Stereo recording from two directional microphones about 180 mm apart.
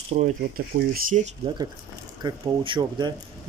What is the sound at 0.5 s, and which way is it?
Speech, 50° right (ahead or behind).